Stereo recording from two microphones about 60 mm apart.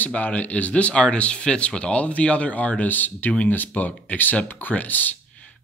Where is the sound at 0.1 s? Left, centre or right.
Left.